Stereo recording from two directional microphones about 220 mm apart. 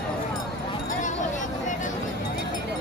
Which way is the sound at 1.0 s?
35° left (ahead or behind).